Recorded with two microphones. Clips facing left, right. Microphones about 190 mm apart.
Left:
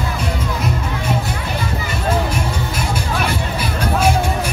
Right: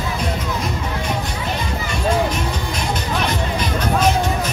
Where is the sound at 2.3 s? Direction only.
10° left (ahead or behind).